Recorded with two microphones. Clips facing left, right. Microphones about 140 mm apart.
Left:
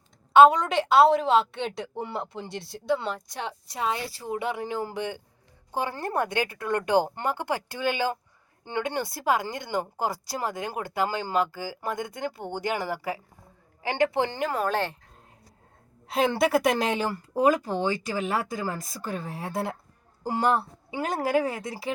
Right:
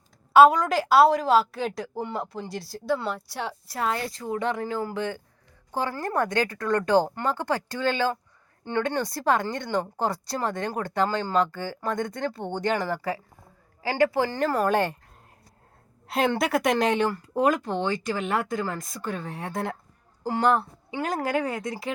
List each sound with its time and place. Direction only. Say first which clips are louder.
0.3 s speech: even; centre (ahead or behind)
3.8 s speech: right 1 dB; 20° left (ahead or behind)
4.0 s speech: right 2 dB; 10° left (ahead or behind)
14.6 s speech: right 4 dB; 15° right (ahead or behind)
16.0 s speech: left 1 dB; centre (ahead or behind)